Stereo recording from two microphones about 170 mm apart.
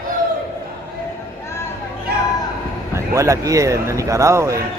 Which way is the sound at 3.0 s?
15° right (ahead or behind).